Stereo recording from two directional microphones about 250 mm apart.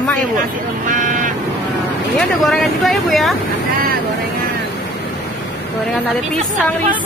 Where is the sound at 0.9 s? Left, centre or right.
Right.